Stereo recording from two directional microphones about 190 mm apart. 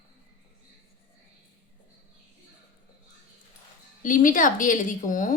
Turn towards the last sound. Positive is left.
turn(degrees=45)  # may be behind; listen again after turning